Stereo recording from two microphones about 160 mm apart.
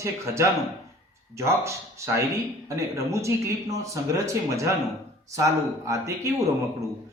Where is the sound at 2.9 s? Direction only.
20° right (ahead or behind).